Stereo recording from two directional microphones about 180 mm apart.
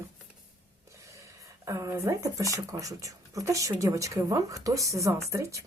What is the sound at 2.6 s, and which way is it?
A woman's voice, 20° right (ahead or behind).